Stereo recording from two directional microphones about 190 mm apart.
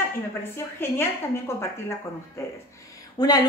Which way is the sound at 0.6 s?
10° left (ahead or behind).